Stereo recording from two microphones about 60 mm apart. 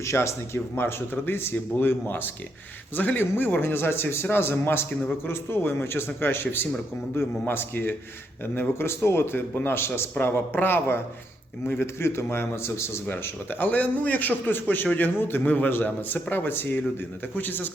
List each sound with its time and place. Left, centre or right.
0.0 s a man's voice: left